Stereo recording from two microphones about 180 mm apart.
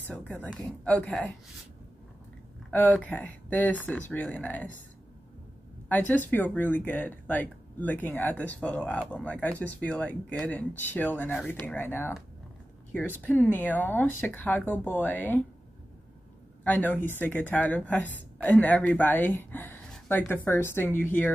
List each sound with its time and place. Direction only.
0.3 s speech: 5° left (ahead or behind)
2.7 s speech: 10° left (ahead or behind)
5.9 s speech: 10° left (ahead or behind)
16.6 s speech: 10° left (ahead or behind)